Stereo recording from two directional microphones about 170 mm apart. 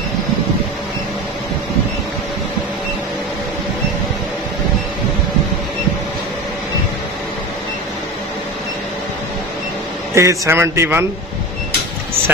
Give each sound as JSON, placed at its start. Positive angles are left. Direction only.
{"t": 10.1, "sound": "speech", "side_deg": -15}